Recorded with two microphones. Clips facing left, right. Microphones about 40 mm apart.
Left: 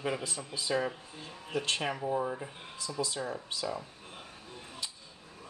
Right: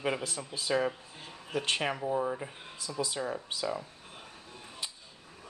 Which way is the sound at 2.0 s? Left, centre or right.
Centre.